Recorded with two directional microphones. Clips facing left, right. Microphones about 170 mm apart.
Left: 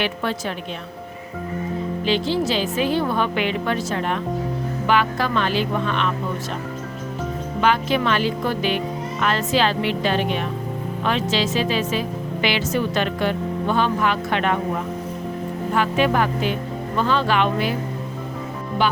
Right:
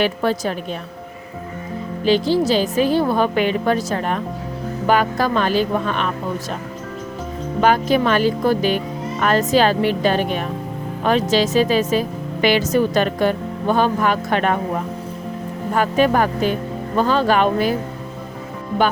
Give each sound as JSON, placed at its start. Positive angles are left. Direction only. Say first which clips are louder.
{"t": 0.0, "sound": "a woman's voice", "louder": "right 5 dB", "side_deg": -40}
{"t": 2.0, "sound": "a woman's voice", "louder": "right 6 dB", "side_deg": -40}
{"t": 7.6, "sound": "a woman's voice", "louder": "right 4 dB", "side_deg": -40}
{"t": 15.7, "sound": "a woman's voice", "louder": "right 3 dB", "side_deg": -40}
{"t": 18.8, "sound": "a woman's voice", "louder": "right 3 dB", "side_deg": -45}